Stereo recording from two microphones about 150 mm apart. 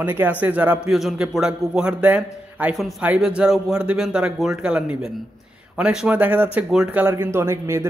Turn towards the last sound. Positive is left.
turn(degrees=-15)  # may be behind; listen again after turning